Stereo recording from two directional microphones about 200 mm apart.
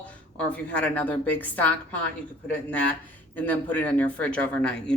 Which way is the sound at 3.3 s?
10° left (ahead or behind).